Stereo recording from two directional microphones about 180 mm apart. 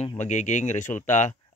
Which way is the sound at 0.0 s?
40° left (ahead or behind).